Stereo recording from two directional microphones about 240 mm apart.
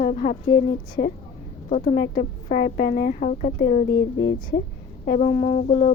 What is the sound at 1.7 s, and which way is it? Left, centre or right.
A woman's voice, left.